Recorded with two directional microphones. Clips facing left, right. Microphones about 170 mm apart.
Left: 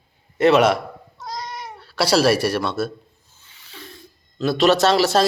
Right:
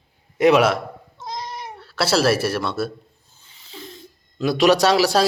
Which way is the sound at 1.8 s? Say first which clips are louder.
Left 2 dB; centre (ahead or behind).